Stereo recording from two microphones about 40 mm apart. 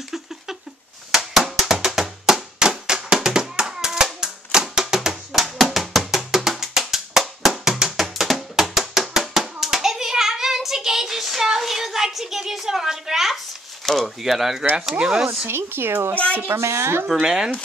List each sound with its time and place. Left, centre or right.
1.1 s a sound: centre
1.9 s music: centre
2.9 s hands: centre
5.3 s music: centre
9.4 s hands: centre
13.8 s a sound: centre
15.0 s speech: centre
15.4 s speech: right
16.4 s speech: right
17.2 s speech: centre